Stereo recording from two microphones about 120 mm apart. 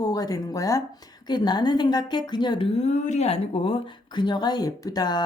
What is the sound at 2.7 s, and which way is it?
Speech, 70° left (ahead or behind).